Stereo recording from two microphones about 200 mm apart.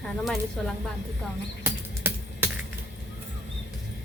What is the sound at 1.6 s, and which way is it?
Typing, 10° right (ahead or behind).